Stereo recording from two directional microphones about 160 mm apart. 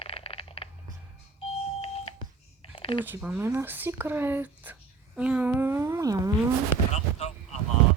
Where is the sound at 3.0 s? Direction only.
10° right (ahead or behind).